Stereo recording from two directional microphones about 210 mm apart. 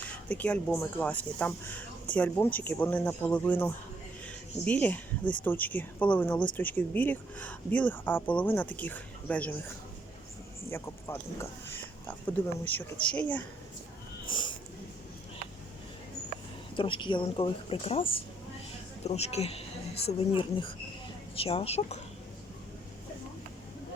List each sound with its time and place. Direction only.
0.0 s speech: 5° left (ahead or behind)
10.7 s speech: 10° left (ahead or behind)
14.3 s a sound: 25° left (ahead or behind)
16.7 s a woman's voice: 25° left (ahead or behind)